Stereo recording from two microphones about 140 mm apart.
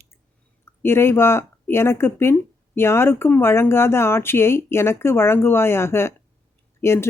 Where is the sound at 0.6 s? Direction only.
15° left (ahead or behind).